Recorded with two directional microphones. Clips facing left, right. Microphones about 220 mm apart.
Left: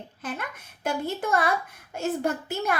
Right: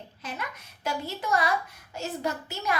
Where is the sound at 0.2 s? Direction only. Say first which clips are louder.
Left 3 dB; 50° left (ahead or behind).